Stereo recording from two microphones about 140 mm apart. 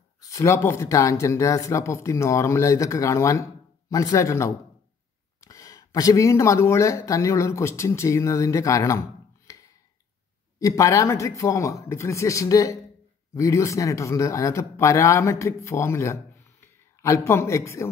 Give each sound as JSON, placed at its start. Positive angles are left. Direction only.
{"t": 0.2, "sound": "speech", "side_deg": 20}
{"t": 9.5, "sound": "a sound", "side_deg": 25}
{"t": 10.6, "sound": "speech", "side_deg": 25}